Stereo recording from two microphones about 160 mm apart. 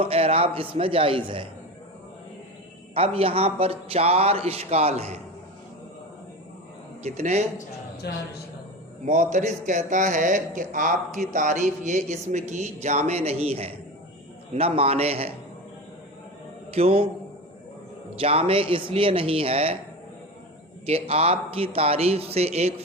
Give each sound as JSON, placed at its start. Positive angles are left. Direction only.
{"t": 0.0, "sound": "a man's voice", "side_deg": -35}
{"t": 2.9, "sound": "a man's voice", "side_deg": -35}
{"t": 7.0, "sound": "a man's voice", "side_deg": -45}
{"t": 8.0, "sound": "a man's voice", "side_deg": 90}
{"t": 9.0, "sound": "a man's voice", "side_deg": -50}
{"t": 16.7, "sound": "a man's voice", "side_deg": -40}
{"t": 18.2, "sound": "a man's voice", "side_deg": -35}
{"t": 20.8, "sound": "a man's voice", "side_deg": -40}